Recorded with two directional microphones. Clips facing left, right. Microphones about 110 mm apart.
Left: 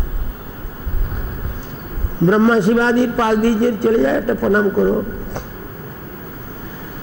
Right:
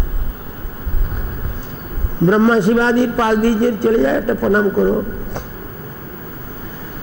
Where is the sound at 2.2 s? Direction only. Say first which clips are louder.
Even; 20° right (ahead or behind).